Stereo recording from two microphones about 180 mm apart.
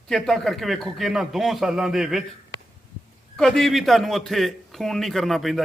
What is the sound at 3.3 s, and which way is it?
A man's voice, centre (ahead or behind).